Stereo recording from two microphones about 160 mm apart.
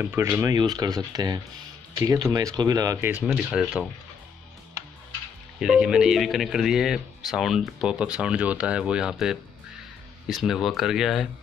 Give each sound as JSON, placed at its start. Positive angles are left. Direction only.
{"t": 0.0, "sound": "speech", "side_deg": -15}
{"t": 3.1, "sound": "speech", "side_deg": -10}
{"t": 5.6, "sound": "speech", "side_deg": -5}